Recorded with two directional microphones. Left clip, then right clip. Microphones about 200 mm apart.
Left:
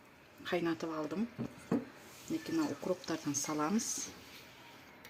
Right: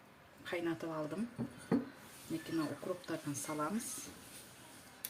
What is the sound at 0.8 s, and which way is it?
Speech, 35° left (ahead or behind).